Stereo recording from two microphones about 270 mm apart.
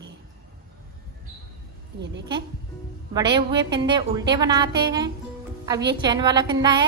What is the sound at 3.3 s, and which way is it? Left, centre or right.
A woman's voice, centre.